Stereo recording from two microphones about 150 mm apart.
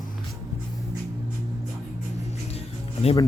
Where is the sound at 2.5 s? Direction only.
40° left (ahead or behind).